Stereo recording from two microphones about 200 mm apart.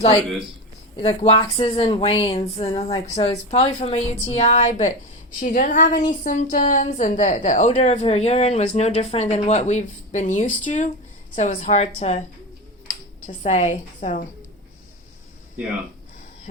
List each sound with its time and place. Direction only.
0.9 s a woman's voice: 30° left (ahead or behind)
13.2 s a woman's voice: 35° left (ahead or behind)